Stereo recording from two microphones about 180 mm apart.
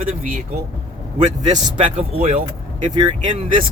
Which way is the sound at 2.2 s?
50° right (ahead or behind).